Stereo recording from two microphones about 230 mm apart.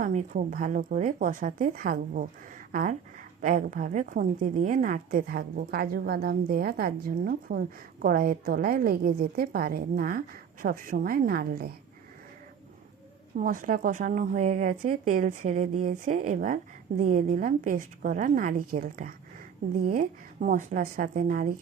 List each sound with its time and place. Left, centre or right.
0.0 s speech: right
13.4 s speech: right